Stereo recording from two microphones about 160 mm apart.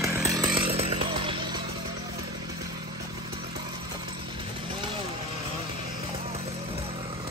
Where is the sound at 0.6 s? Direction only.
35° right (ahead or behind).